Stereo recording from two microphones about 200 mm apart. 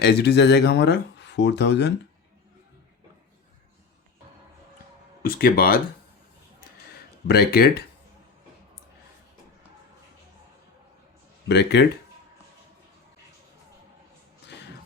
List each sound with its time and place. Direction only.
0.0 s speech: 55° left (ahead or behind)
5.3 s speech: 50° left (ahead or behind)
7.3 s speech: 50° left (ahead or behind)
11.4 s speech: 55° left (ahead or behind)